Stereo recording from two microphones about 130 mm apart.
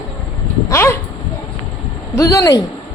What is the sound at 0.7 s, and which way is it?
Speech, 20° left (ahead or behind).